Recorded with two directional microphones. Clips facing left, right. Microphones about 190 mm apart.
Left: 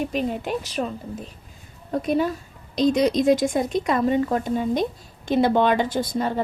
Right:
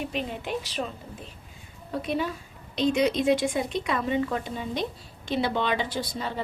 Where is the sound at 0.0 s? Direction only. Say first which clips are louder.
Left 6 dB; 45° left (ahead or behind).